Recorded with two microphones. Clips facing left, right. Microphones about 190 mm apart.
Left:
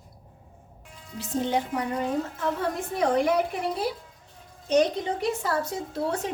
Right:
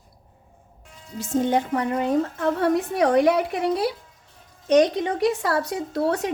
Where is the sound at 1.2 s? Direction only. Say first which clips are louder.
Right 5 dB; 50° right (ahead or behind).